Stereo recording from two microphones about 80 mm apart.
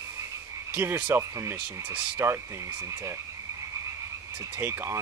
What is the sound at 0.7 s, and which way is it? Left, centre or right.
Speech, right.